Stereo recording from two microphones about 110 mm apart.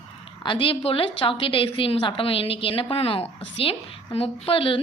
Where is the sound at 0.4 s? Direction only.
50° left (ahead or behind).